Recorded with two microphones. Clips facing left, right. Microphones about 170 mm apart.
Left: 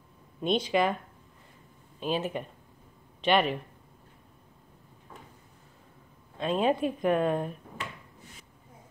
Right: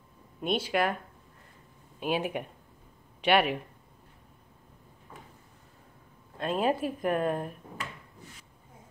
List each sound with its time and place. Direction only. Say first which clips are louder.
0.4 s speech: left 2 dB; 5° right (ahead or behind)
2.0 s speech: even; 10° right (ahead or behind)
6.3 s speech: left 2 dB; 5° right (ahead or behind)